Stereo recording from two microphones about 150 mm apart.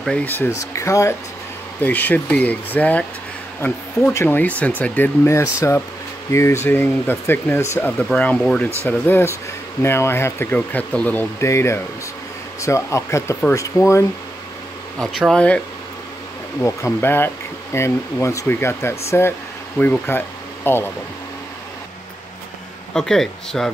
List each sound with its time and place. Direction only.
0.0 s speech: 5° left (ahead or behind)
15.0 s speech: centre (ahead or behind)
16.6 s speech: 15° left (ahead or behind)
22.9 s speech: 5° left (ahead or behind)